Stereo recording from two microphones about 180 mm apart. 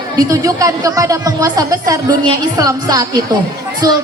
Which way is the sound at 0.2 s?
20° right (ahead or behind).